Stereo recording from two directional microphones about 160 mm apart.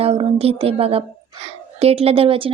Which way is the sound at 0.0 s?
40° right (ahead or behind).